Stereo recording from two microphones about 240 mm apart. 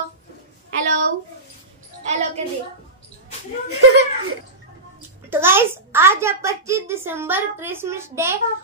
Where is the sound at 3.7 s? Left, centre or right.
Right.